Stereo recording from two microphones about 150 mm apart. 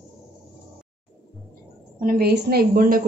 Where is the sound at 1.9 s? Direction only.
80° right.